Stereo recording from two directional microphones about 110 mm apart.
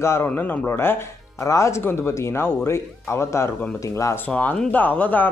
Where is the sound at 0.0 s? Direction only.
25° left (ahead or behind).